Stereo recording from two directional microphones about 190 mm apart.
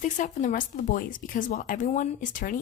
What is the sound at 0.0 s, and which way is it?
A woman's voice, 40° left (ahead or behind).